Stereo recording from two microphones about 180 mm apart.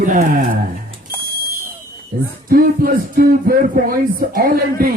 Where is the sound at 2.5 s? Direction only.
55° right (ahead or behind).